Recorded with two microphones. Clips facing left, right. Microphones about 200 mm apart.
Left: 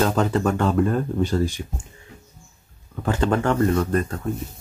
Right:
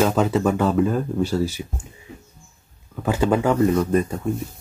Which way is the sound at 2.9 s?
10° right (ahead or behind).